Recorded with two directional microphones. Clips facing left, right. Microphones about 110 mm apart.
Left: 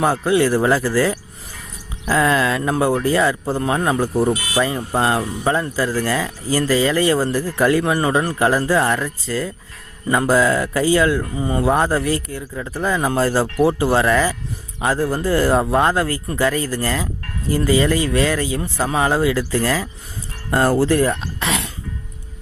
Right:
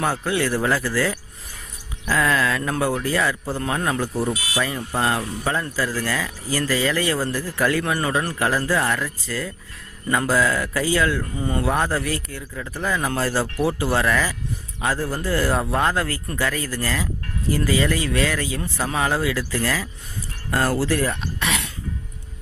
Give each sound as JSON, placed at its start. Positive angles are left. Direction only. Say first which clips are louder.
{"t": 0.0, "sound": "speech", "louder": "left 6 dB", "side_deg": 20}
{"t": 4.0, "sound": "speech", "louder": "left 6 dB", "side_deg": 45}
{"t": 4.6, "sound": "speech", "louder": "left 3 dB", "side_deg": 30}